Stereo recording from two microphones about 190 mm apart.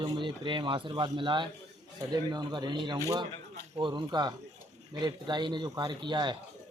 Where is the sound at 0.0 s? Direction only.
25° right (ahead or behind).